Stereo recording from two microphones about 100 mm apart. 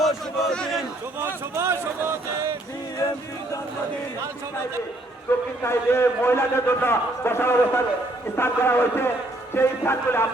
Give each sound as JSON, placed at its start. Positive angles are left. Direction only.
{"t": 0.5, "sound": "a sound", "side_deg": 10}
{"t": 1.2, "sound": "speech", "side_deg": -25}
{"t": 5.3, "sound": "a man's voice", "side_deg": 20}